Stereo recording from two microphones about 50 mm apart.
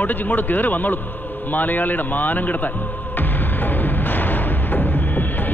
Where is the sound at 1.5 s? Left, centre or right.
Left.